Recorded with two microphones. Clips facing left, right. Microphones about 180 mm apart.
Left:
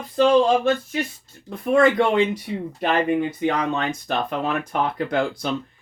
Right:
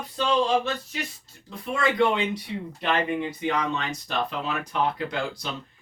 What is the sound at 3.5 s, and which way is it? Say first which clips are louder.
Speech: left 2 dB; 55° left (ahead or behind).